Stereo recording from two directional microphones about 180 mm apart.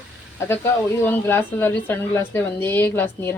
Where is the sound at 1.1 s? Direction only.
10° left (ahead or behind).